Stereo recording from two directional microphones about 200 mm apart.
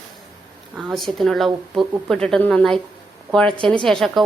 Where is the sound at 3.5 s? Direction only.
25° right (ahead or behind).